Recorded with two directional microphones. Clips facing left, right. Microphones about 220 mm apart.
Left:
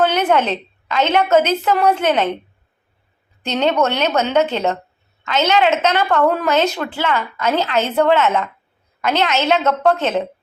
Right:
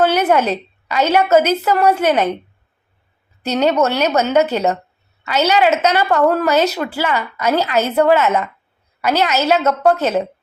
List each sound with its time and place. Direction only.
0.0 s a woman's voice: 10° right (ahead or behind)
3.4 s a woman's voice: 5° right (ahead or behind)